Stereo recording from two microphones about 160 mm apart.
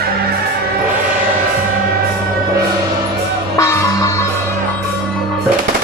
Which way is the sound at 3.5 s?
20° left (ahead or behind).